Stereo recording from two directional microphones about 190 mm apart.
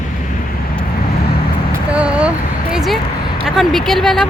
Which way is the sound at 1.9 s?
5° right (ahead or behind).